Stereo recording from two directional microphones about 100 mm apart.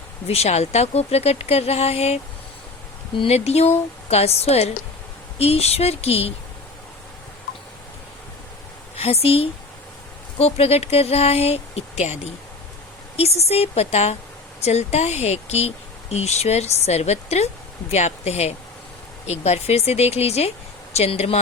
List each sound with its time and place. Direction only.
0.3 s speech: 90° left
3.2 s speech: 90° left
9.0 s speech: 90° left
13.1 s speech: 90° left